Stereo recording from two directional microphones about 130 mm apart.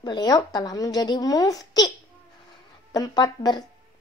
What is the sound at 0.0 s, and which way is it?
Speech, 30° left (ahead or behind).